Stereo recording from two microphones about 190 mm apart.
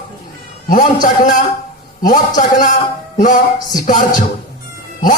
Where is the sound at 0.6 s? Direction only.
45° left (ahead or behind).